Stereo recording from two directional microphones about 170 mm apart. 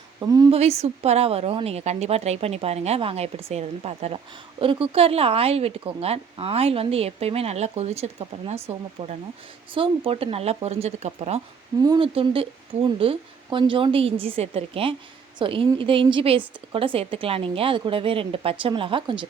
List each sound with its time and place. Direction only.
0.2 s a woman's voice: 20° right (ahead or behind)
0.5 s speech: 40° right (ahead or behind)
11.8 s speech: 25° right (ahead or behind)